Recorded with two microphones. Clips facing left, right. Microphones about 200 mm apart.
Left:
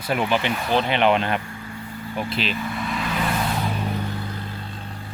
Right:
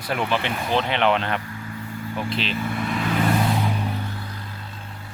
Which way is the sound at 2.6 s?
50° right (ahead or behind).